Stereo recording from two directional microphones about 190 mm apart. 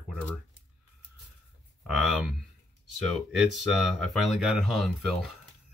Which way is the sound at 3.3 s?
Centre (ahead or behind).